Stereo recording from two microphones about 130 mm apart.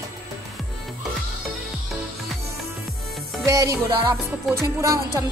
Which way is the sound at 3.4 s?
25° right (ahead or behind).